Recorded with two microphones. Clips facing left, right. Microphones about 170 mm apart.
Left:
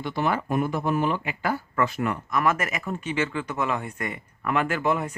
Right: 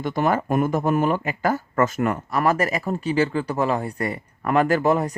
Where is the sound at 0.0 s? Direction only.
45° right (ahead or behind).